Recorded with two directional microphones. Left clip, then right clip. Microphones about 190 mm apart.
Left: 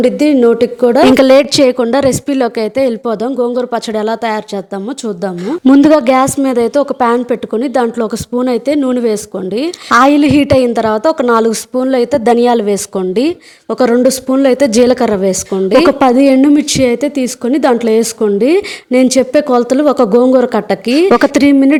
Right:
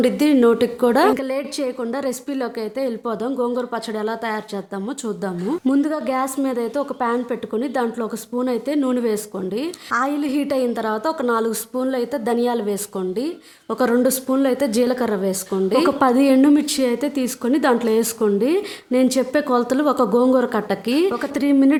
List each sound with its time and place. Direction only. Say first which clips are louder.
0.0 s a woman's voice: left 7 dB; 20° left (ahead or behind)
1.1 s a woman's voice: left 17 dB; 45° left (ahead or behind); by 21.8 s 30° left (ahead or behind)